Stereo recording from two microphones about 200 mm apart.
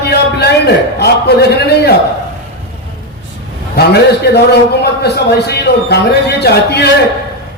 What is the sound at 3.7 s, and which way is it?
A man's voice, 55° left (ahead or behind).